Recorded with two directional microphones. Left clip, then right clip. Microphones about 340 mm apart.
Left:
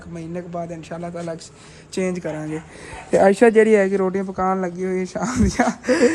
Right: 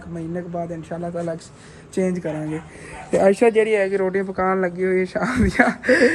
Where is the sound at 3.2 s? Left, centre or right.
Left.